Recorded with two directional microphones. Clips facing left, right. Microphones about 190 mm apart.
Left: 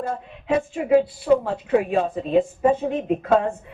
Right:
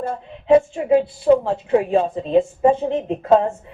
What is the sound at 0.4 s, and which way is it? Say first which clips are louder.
Music: right 8 dB; 30° right (ahead or behind).